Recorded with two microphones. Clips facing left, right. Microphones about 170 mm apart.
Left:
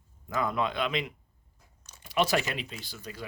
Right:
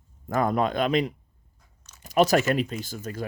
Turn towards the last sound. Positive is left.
turn(degrees=-45)  # may be behind; listen again after turning